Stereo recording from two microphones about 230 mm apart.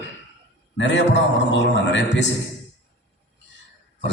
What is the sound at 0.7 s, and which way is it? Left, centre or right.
A man's voice, left.